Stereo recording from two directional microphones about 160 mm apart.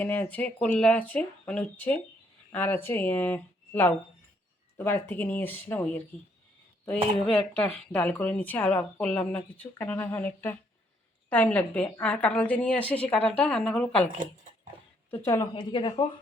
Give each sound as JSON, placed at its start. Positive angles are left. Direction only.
{"t": 0.0, "sound": "speech", "side_deg": 10}
{"t": 15.1, "sound": "a woman's voice", "side_deg": 20}